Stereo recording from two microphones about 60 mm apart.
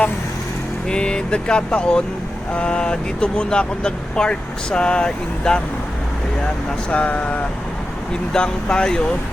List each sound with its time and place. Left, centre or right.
0.9 s speech: centre